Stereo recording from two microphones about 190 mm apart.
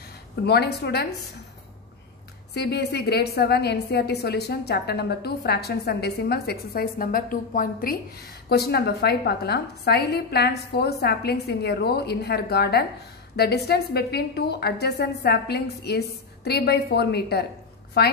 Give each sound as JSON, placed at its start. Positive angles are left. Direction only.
{"t": 0.5, "sound": "a woman's voice", "side_deg": 60}
{"t": 2.5, "sound": "a woman's voice", "side_deg": 60}